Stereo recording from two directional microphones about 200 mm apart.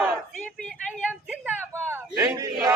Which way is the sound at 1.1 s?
5° right (ahead or behind).